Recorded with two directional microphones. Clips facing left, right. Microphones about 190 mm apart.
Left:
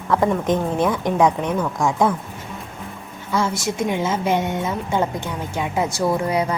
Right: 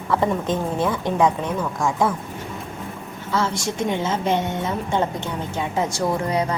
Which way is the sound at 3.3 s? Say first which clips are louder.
Left 2 dB; 10° left (ahead or behind).